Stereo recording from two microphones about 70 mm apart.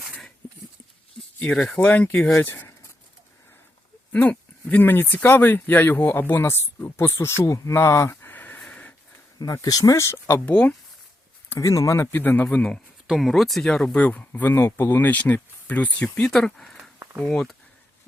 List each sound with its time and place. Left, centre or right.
1.5 s speech: centre
2.1 s speech: centre
2.4 s speech: left
4.1 s speech: left
8.3 s a sound: left
8.6 s dog: centre
9.4 s speech: left
10.4 s speech: centre
11.6 s speech: left
12.1 s speech: left
13.1 s speech: centre
14.0 s speech: left
14.4 s speech: left
16.2 s speech: centre